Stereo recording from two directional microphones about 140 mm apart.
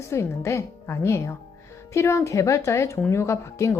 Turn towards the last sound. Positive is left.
turn(degrees=20)  # may be behind; listen again after turning